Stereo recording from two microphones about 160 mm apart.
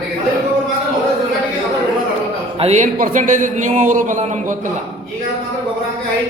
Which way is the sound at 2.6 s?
45° right (ahead or behind).